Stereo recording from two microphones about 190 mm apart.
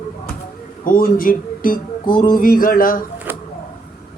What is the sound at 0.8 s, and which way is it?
Speech, 50° left (ahead or behind).